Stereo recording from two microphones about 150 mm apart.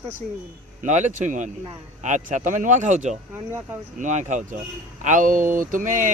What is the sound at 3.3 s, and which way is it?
Speech, 15° right (ahead or behind).